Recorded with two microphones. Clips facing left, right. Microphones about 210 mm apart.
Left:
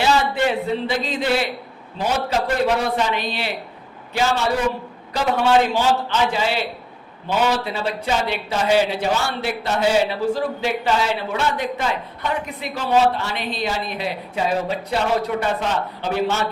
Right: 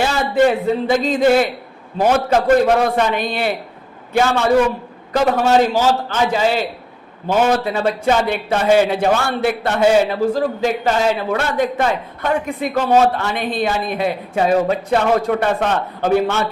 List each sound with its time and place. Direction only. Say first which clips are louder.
0.0 s a man's voice: right 4 dB; 45° right (ahead or behind)